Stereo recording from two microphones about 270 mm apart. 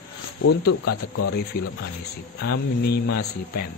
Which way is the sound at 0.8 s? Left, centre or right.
Left.